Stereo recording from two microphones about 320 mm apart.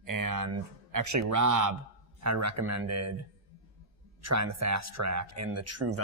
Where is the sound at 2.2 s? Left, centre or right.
Right.